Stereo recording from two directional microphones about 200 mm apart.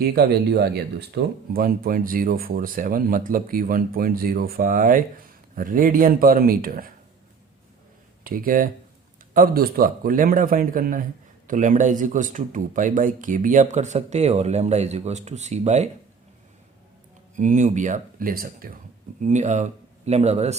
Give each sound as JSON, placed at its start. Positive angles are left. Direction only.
{"t": 0.0, "sound": "speech", "side_deg": -50}
{"t": 8.2, "sound": "speech", "side_deg": -45}
{"t": 17.3, "sound": "speech", "side_deg": -40}
{"t": 19.2, "sound": "speech", "side_deg": -35}